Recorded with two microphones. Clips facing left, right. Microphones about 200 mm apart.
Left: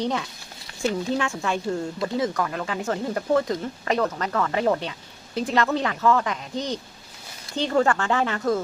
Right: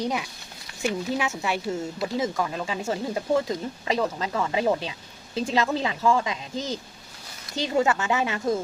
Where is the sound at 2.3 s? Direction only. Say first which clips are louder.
Left 1 dB; 20° right (ahead or behind).